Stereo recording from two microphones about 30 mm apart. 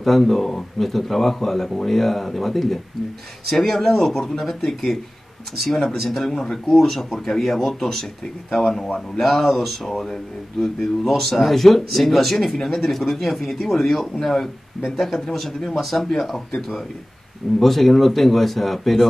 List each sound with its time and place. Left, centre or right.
0.0 s speech: centre
5.7 s speech: centre
7.1 s speech: centre
15.3 s speech: centre
17.6 s speech: centre